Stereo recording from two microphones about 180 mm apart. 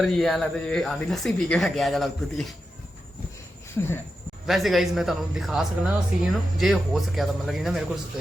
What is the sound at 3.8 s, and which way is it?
Speech, 10° left (ahead or behind).